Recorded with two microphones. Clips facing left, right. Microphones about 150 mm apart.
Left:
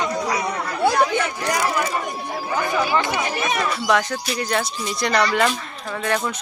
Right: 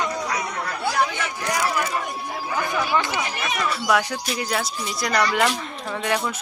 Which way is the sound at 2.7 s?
5° left (ahead or behind).